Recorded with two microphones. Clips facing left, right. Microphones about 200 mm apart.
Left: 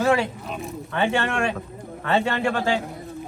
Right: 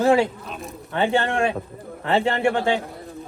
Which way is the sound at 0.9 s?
30° right (ahead or behind).